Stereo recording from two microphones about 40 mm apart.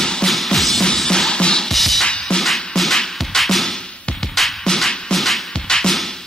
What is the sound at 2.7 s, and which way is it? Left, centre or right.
Music, centre.